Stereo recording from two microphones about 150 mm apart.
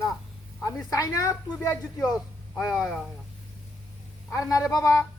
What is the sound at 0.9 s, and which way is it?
Speech, 20° left (ahead or behind).